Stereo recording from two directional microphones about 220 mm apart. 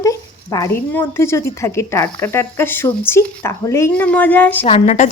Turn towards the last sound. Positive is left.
turn(degrees=30)  # may be behind; listen again after turning